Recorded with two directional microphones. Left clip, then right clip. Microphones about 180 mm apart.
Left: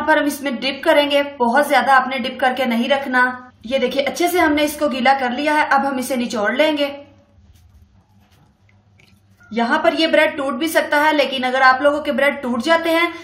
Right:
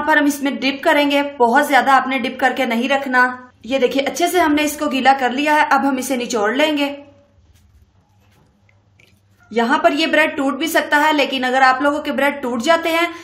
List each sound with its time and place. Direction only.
0.0 s a woman's voice: 50° right (ahead or behind)
9.5 s a woman's voice: 50° right (ahead or behind)